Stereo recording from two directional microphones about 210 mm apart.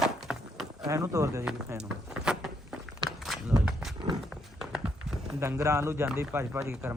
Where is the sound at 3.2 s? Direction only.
Centre (ahead or behind).